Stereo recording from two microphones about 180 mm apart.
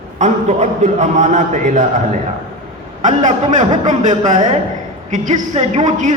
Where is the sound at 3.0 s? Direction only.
45° right (ahead or behind).